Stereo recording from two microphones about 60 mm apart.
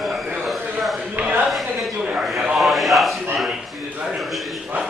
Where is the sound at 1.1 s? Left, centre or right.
Right.